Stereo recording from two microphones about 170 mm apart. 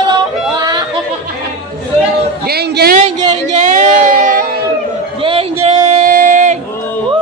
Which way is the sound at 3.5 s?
45° right (ahead or behind).